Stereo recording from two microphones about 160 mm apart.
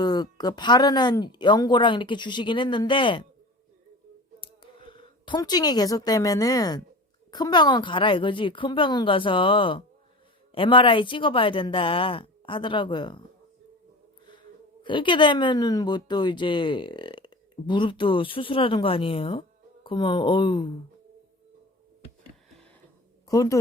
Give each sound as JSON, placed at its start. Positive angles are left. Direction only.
{"t": 0.0, "sound": "speech", "side_deg": 25}
{"t": 4.4, "sound": "a woman's voice", "side_deg": 30}
{"t": 14.3, "sound": "speech", "side_deg": 30}
{"t": 23.3, "sound": "speech", "side_deg": 20}